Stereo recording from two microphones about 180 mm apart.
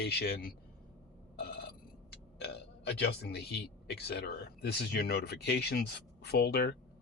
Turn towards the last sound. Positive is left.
turn(degrees=65)  # may be behind; listen again after turning